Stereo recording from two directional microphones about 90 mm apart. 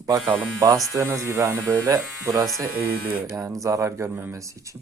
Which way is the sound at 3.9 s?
25° right (ahead or behind).